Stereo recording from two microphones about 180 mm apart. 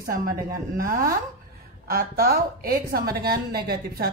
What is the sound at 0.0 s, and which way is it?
A woman's voice, 50° right (ahead or behind).